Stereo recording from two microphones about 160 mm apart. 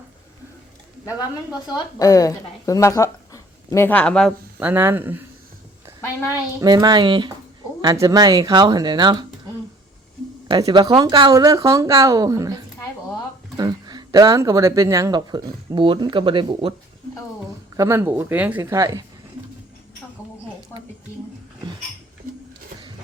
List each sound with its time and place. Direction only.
1.5 s a woman's voice: 25° left (ahead or behind); by 4.3 s 5° left (ahead or behind)
4.6 s a woman's voice: 15° right (ahead or behind)
6.6 s speech: 25° right (ahead or behind)
10.5 s speech: 30° right (ahead or behind)
17.7 s a woman's voice: 15° right (ahead or behind)